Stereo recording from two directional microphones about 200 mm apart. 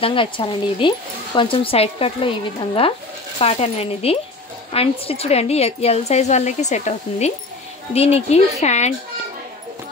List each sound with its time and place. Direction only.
0.0 s speech: 25° left (ahead or behind)